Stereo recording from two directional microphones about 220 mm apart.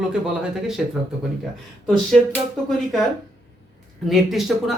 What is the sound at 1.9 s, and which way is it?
Speech, centre (ahead or behind).